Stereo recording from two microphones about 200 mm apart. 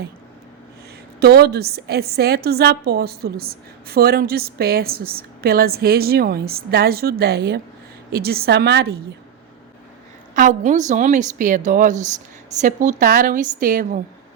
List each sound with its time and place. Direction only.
1.2 s a woman's voice: 55° right (ahead or behind)
10.3 s a woman's voice: 40° right (ahead or behind)